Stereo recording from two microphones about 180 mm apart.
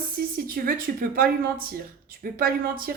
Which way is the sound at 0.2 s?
55° right (ahead or behind).